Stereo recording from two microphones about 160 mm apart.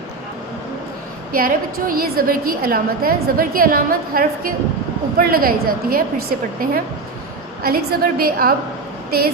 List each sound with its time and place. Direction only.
1.3 s a woman's voice: 65° right (ahead or behind)